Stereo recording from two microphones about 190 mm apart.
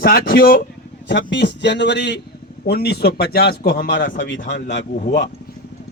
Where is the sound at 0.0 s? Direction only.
50° left (ahead or behind).